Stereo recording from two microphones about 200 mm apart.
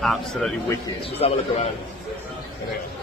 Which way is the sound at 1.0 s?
30° left (ahead or behind).